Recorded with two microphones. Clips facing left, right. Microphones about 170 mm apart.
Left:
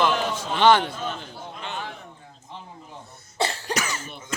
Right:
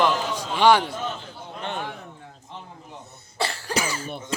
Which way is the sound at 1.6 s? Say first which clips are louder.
Right 4 dB; 55° right (ahead or behind).